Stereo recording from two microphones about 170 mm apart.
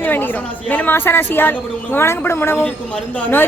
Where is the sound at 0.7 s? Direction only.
10° left (ahead or behind).